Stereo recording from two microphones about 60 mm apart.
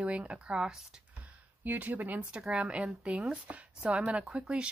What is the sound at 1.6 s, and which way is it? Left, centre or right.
Speech, right.